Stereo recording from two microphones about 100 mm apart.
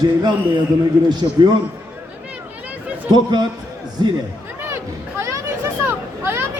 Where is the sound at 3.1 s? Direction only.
45° right (ahead or behind).